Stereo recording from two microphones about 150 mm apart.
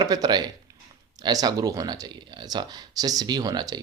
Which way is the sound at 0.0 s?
25° right (ahead or behind).